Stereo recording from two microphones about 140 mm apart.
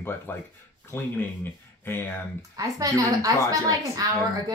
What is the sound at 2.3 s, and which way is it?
A woman's voice, 25° right (ahead or behind).